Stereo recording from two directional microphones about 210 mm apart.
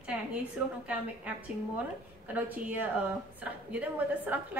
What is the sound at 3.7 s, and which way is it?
Speech, 10° right (ahead or behind).